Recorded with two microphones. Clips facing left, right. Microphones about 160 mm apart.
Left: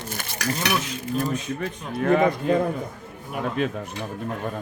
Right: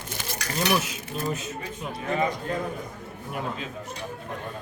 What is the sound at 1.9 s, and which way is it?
Speech, 60° left (ahead or behind).